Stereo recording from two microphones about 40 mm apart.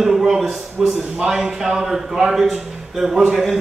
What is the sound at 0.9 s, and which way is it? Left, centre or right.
A man's voice, centre.